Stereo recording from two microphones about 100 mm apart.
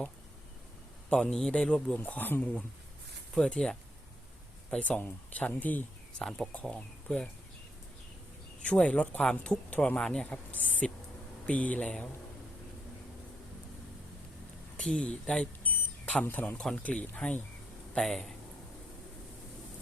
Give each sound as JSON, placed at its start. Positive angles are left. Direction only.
{"t": 1.1, "sound": "speech", "side_deg": 5}
{"t": 6.2, "sound": "speech", "side_deg": 5}
{"t": 8.6, "sound": "speech", "side_deg": 10}
{"t": 14.8, "sound": "speech", "side_deg": 10}